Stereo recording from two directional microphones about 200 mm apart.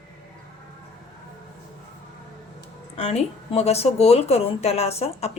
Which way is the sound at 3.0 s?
30° left (ahead or behind).